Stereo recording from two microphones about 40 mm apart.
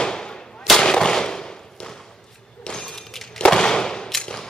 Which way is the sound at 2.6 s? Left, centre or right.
Centre.